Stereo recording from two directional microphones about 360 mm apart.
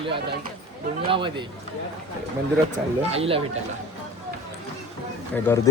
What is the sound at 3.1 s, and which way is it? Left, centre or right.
Speech, centre.